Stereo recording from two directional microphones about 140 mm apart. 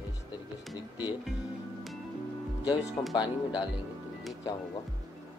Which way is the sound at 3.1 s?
30° left (ahead or behind).